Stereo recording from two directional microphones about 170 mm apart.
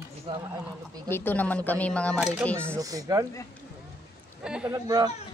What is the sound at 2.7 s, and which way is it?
Speech, 20° right (ahead or behind).